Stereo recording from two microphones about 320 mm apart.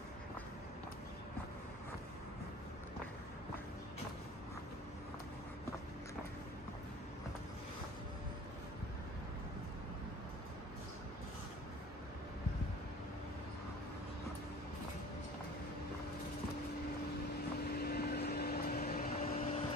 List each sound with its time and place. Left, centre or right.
17.6 s vehicle: left